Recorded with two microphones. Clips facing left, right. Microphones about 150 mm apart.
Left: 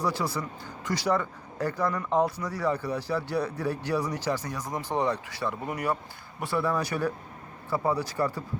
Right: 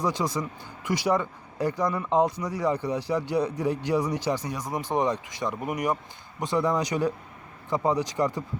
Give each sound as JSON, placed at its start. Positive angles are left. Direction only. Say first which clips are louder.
{"t": 0.0, "sound": "speech", "louder": "right 2 dB", "side_deg": -15}